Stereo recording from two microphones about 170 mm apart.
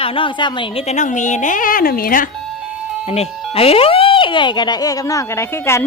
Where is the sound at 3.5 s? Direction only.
35° left (ahead or behind).